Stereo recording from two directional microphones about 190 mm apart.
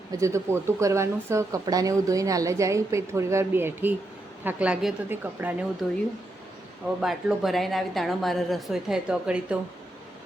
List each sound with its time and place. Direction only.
0.1 s speech: 15° right (ahead or behind)
7.0 s a woman's voice: centre (ahead or behind)